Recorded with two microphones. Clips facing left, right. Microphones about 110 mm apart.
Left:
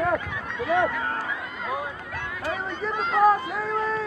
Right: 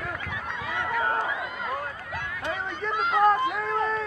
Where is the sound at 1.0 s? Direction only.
15° right (ahead or behind).